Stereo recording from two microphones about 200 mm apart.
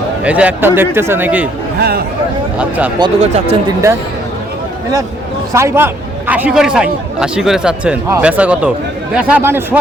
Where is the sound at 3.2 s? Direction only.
30° right (ahead or behind).